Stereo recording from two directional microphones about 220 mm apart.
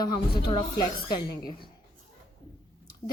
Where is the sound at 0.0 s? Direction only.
20° left (ahead or behind).